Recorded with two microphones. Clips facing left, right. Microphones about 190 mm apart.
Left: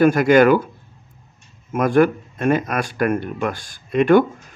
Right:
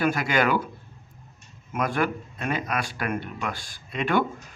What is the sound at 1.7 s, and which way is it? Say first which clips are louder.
Speech: left 10 dB; 50° left (ahead or behind).